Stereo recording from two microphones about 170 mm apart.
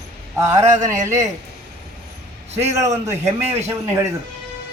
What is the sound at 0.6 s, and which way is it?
Speech, 45° right (ahead or behind).